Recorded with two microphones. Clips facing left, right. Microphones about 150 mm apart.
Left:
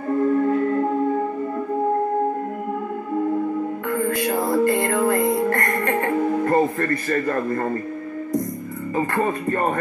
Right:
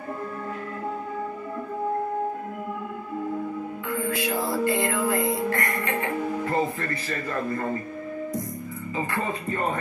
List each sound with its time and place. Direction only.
3.9 s music: 50° left (ahead or behind)
8.9 s music: 50° left (ahead or behind)